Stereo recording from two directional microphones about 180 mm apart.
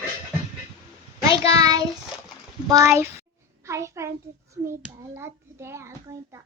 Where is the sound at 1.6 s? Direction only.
20° right (ahead or behind).